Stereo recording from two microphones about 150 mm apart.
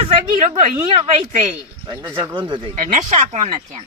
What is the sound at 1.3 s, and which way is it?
Snicker, 55° right (ahead or behind).